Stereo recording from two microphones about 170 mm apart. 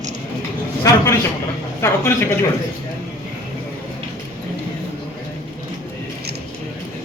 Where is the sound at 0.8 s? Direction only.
20° left (ahead or behind).